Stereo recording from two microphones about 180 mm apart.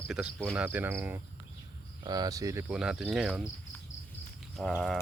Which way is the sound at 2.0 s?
20° right (ahead or behind).